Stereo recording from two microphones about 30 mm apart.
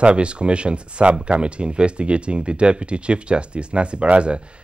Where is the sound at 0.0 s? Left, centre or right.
Right.